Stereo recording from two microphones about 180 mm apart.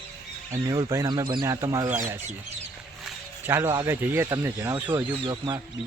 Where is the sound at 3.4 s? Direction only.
15° right (ahead or behind).